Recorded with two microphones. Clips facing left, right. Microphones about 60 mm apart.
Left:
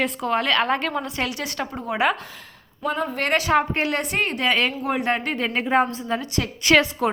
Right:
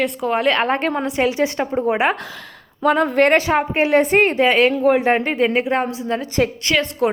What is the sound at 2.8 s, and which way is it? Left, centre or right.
Speech, right.